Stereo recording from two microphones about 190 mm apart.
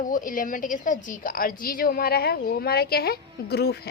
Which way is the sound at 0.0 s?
45° left (ahead or behind).